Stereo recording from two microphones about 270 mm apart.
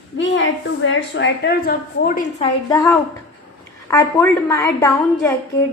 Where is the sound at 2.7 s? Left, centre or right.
Centre.